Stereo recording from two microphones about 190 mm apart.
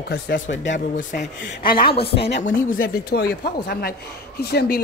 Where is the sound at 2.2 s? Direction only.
65° left (ahead or behind).